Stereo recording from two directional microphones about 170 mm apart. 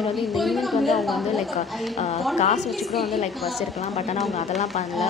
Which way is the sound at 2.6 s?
Centre (ahead or behind).